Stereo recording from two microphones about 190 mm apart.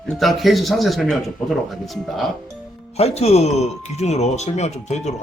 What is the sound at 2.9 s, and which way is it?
Speech, 35° left (ahead or behind).